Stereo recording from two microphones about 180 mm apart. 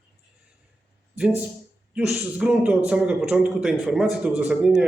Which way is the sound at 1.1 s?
5° right (ahead or behind).